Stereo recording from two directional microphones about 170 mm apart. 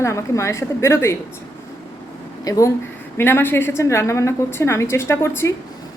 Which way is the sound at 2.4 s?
20° left (ahead or behind).